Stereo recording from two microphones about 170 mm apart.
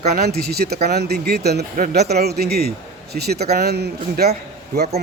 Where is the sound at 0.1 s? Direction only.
65° right (ahead or behind).